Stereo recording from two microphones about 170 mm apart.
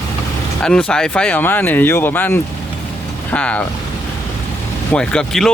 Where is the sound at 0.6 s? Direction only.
5° left (ahead or behind).